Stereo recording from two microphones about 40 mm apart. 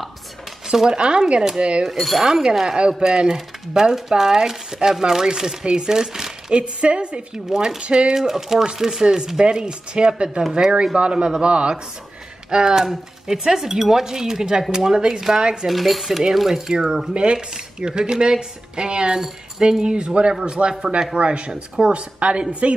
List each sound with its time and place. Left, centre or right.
0.7 s speech: right
1.9 s speech: centre
6.5 s speech: right
7.3 s speech: centre
7.8 s speech: right
8.1 s speech: centre
15.7 s speech: centre
17.1 s speech: right
21.5 s speech: centre
21.9 s a woman's voice: right